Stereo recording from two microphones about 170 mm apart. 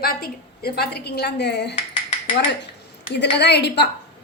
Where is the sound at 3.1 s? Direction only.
80° left.